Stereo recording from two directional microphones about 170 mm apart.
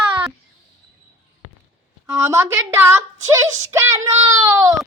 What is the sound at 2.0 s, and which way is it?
A woman's voice, 15° right (ahead or behind).